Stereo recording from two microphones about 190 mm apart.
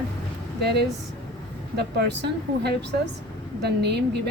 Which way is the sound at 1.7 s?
60° right (ahead or behind).